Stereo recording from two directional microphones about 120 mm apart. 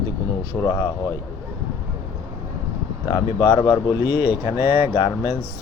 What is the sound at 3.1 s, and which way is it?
Speech, 35° left (ahead or behind).